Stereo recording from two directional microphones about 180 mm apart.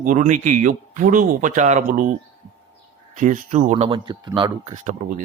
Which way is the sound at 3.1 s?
45° right (ahead or behind).